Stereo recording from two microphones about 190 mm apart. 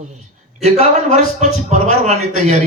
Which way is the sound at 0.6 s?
35° right (ahead or behind).